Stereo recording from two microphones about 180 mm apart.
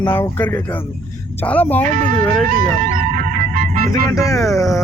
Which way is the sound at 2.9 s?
45° right (ahead or behind).